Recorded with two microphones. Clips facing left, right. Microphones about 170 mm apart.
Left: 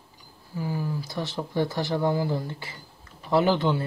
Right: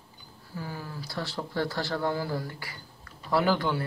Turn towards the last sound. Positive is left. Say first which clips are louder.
# left 4 dB
turn(degrees=20)  # may be behind; listen again after turning